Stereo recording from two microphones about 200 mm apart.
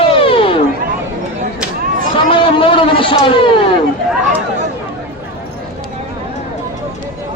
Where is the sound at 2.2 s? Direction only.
25° left (ahead or behind).